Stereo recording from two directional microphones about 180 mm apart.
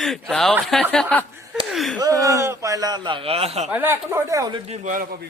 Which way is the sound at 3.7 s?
10° right (ahead or behind).